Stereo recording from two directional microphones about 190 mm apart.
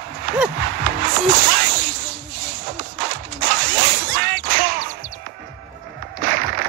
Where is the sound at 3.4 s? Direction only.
50° right (ahead or behind).